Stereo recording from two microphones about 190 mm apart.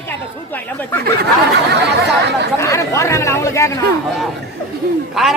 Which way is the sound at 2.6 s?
15° left (ahead or behind).